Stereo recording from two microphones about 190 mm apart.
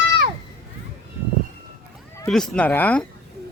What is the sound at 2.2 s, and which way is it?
Speech, centre (ahead or behind).